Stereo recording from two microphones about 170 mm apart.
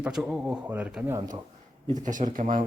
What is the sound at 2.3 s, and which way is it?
Speech, 55° right (ahead or behind).